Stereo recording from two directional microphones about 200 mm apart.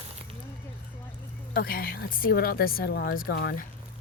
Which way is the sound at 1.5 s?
50° left (ahead or behind).